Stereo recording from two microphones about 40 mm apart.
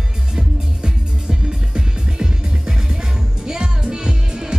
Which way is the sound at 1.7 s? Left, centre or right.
Centre.